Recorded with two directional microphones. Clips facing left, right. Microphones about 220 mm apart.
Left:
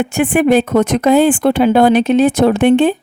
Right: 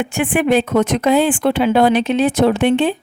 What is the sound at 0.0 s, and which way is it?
Speech, 40° left (ahead or behind).